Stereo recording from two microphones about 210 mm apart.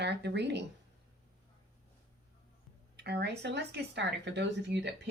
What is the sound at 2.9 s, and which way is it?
Speech, 50° right (ahead or behind).